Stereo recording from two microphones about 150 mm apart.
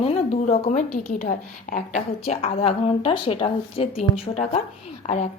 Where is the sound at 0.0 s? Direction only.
45° left (ahead or behind).